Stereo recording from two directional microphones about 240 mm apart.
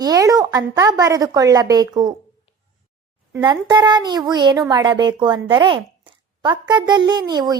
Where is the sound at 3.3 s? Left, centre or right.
Centre.